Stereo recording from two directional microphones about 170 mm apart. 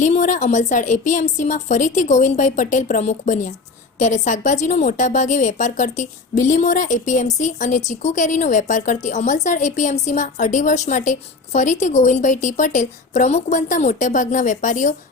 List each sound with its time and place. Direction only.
0.0 s a woman's voice: 45° left (ahead or behind)